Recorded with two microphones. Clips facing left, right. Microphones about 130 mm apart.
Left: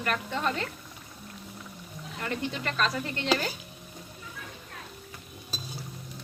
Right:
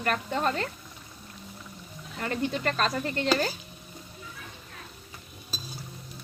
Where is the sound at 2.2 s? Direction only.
40° right (ahead or behind).